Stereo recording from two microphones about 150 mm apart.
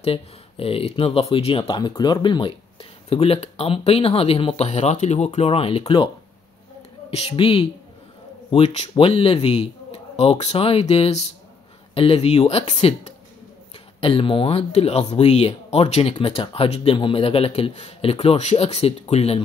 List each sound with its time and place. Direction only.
0.0 s speech: 40° left (ahead or behind)
7.1 s speech: 45° left (ahead or behind)